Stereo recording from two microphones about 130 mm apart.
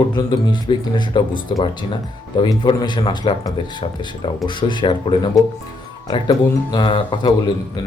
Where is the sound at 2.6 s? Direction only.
35° left (ahead or behind).